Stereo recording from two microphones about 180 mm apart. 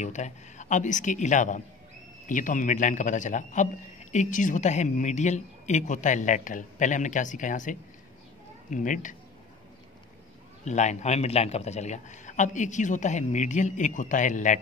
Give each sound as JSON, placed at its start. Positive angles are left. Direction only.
{"t": 0.0, "sound": "a man's voice", "side_deg": 40}
{"t": 10.6, "sound": "a man's voice", "side_deg": 40}